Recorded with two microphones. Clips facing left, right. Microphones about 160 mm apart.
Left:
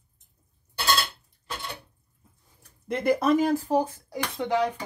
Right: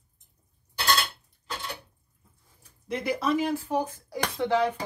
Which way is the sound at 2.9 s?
50° left (ahead or behind).